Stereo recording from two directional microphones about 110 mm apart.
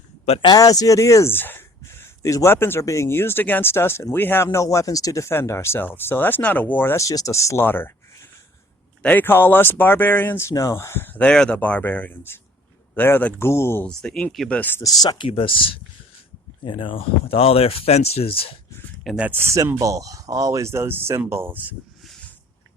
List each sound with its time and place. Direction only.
0.4 s speech: 35° left (ahead or behind)
13.8 s speech: 10° left (ahead or behind)
14.8 s speech: 35° left (ahead or behind)
15.3 s speech: 55° left (ahead or behind)
19.0 s speech: 10° right (ahead or behind)
19.3 s speech: 25° right (ahead or behind)